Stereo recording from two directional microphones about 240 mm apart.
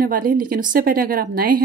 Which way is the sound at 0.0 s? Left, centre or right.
Right.